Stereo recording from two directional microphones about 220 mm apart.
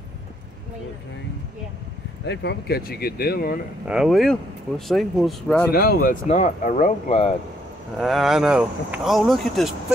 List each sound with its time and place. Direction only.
2.2 s speech: 50° left (ahead or behind)
3.8 s speech: 5° right (ahead or behind)
5.7 s speech: 45° left (ahead or behind)
8.0 s speech: centre (ahead or behind)